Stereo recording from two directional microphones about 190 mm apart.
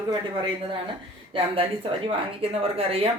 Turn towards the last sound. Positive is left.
turn(degrees=-30)  # may be behind; listen again after turning